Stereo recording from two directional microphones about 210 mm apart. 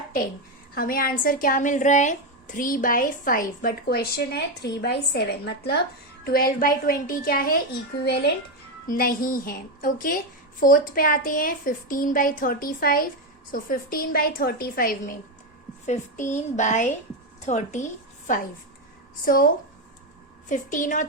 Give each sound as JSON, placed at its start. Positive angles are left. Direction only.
{"t": 0.8, "sound": "a woman's voice", "side_deg": 45}
{"t": 20.5, "sound": "a woman's voice", "side_deg": 40}